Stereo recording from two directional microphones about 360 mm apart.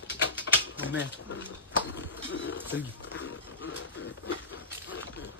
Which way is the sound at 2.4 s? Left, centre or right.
Left.